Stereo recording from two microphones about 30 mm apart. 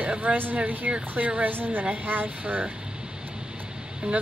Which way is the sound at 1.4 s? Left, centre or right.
Right.